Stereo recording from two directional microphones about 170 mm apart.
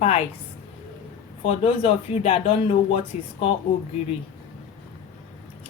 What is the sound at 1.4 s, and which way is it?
Speech, 35° left (ahead or behind).